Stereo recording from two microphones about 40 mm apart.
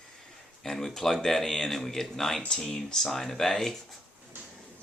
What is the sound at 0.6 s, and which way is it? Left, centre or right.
Speech, centre.